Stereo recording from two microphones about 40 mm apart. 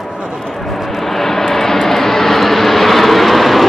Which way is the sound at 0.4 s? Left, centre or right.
Centre.